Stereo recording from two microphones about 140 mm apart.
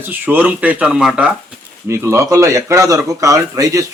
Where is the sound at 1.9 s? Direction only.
20° right (ahead or behind).